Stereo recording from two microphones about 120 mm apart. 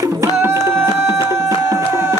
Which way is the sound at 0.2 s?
20° right (ahead or behind).